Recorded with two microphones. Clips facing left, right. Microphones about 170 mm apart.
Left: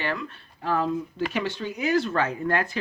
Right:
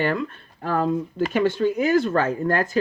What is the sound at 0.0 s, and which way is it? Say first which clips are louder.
Speech: right 7 dB; 45° right (ahead or behind).